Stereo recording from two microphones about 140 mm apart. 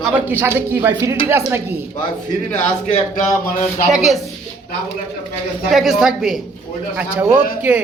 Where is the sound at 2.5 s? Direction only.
55° left (ahead or behind).